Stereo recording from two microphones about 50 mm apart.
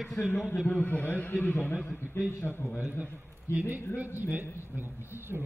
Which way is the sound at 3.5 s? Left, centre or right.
Right.